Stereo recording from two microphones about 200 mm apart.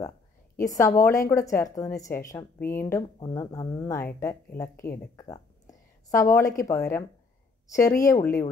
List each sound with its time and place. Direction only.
0.6 s a woman's voice: 15° left (ahead or behind)